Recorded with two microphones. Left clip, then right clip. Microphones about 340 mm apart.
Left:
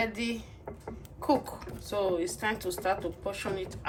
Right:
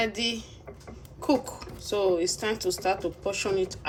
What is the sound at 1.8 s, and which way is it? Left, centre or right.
Speech, centre.